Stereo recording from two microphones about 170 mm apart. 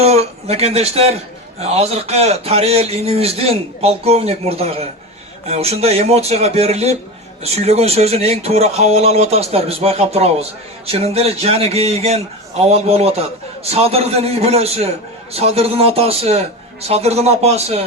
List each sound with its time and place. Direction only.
0.0 s a man's voice: 40° right (ahead or behind)